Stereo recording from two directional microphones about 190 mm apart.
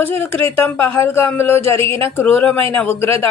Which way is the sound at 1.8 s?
30° right (ahead or behind).